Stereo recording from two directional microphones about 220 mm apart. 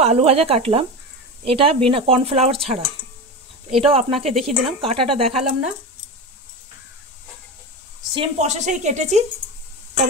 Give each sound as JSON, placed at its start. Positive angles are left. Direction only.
{"t": 0.0, "sound": "speech", "side_deg": -25}
{"t": 8.1, "sound": "a woman's voice", "side_deg": -25}